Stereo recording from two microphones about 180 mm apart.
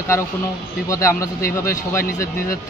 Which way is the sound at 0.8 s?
15° left (ahead or behind).